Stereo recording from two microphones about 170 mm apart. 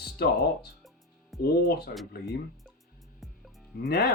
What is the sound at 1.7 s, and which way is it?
Speech, 70° left (ahead or behind).